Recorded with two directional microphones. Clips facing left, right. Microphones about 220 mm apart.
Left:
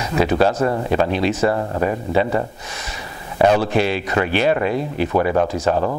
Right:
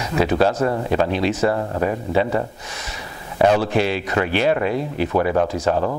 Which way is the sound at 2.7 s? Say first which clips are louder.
Left 1 dB; 10° left (ahead or behind).